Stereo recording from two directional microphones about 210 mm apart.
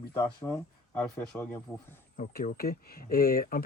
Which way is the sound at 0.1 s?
10° left (ahead or behind).